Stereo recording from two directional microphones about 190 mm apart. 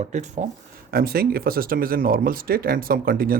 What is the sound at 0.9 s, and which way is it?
Speech, 50° right (ahead or behind).